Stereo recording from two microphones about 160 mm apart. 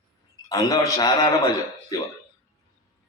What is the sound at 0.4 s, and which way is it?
Speech, 20° left (ahead or behind).